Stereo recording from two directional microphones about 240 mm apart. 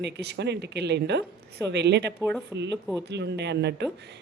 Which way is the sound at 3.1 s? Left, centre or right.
Right.